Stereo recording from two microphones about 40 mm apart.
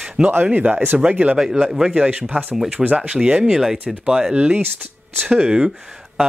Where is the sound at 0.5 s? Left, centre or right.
Right.